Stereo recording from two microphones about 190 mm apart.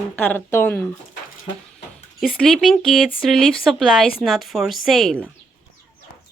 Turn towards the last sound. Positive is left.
turn(degrees=5)  # may be behind; listen again after turning